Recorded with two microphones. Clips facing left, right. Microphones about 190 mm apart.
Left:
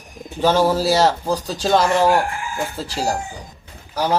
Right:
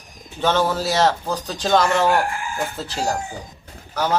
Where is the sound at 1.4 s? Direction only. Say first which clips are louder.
Even; 5° left (ahead or behind).